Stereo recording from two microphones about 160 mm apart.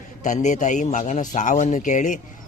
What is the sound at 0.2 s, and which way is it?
A man's voice, 50° left (ahead or behind).